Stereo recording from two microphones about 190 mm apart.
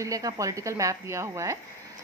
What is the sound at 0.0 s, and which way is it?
A woman's voice, 15° right (ahead or behind).